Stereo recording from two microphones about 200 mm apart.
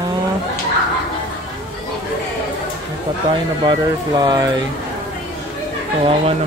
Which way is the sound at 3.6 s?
20° right (ahead or behind).